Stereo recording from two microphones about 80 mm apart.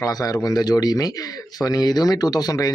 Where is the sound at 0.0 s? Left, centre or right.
Left.